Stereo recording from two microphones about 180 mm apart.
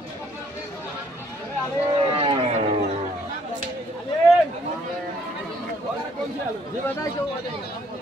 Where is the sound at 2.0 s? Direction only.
30° right (ahead or behind).